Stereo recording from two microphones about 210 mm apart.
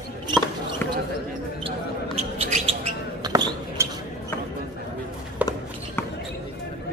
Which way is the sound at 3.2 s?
20° right (ahead or behind).